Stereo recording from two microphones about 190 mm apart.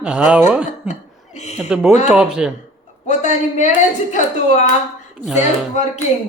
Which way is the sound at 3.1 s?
40° left (ahead or behind).